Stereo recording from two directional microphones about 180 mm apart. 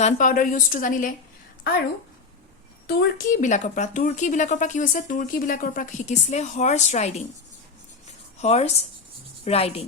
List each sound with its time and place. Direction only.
0.0 s a woman's voice: 45° left (ahead or behind)
2.8 s a woman's voice: 65° left (ahead or behind)
3.4 s a woman's voice: 40° left (ahead or behind)
8.4 s speech: 35° left (ahead or behind)